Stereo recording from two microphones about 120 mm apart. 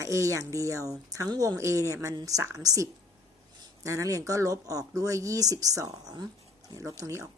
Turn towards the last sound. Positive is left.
turn(degrees=-25)  # may be behind; listen again after turning